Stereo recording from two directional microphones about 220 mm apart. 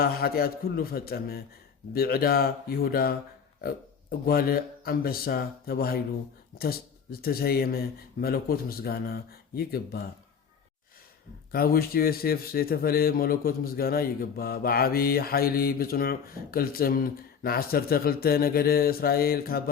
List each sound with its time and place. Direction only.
0.0 s a man's voice: 45° left (ahead or behind)
4.3 s a man's voice: 45° left (ahead or behind)
11.5 s a man's voice: 45° left (ahead or behind)